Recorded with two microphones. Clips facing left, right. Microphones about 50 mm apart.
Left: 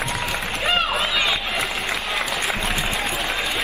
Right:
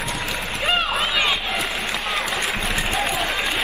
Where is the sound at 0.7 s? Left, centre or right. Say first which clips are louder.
Even; centre.